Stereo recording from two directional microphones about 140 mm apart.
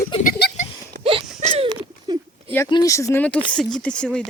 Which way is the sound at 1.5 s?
40° right (ahead or behind).